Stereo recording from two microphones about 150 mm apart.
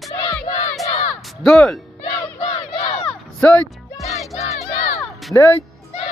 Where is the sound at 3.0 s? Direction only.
10° left (ahead or behind).